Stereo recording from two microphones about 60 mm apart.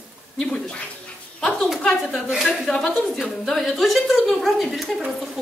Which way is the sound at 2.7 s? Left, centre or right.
Centre.